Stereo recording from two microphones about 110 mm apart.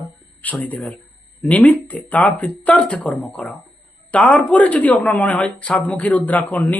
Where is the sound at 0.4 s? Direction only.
15° left (ahead or behind).